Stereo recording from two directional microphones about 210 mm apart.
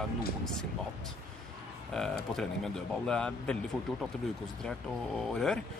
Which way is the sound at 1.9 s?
Centre (ahead or behind).